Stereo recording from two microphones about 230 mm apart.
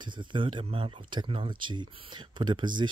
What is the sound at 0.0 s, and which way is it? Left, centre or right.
Speech, centre.